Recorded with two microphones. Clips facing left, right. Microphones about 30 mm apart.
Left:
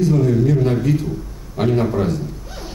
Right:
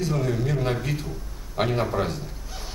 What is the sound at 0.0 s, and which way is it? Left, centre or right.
Speech, centre.